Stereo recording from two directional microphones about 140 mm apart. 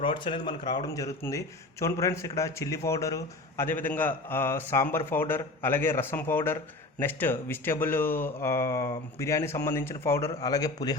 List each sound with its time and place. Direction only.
0.0 s speech: 40° left (ahead or behind)